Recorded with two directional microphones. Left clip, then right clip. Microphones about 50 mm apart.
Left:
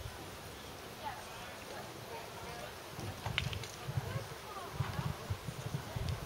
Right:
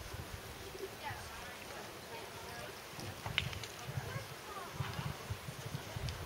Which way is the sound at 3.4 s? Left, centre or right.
Centre.